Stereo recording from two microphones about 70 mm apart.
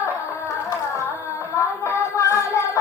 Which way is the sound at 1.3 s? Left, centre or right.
Left.